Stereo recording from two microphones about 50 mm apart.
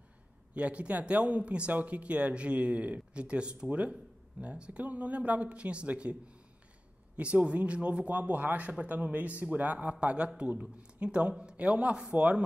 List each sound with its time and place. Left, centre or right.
0.6 s a man's voice: right
7.2 s a man's voice: right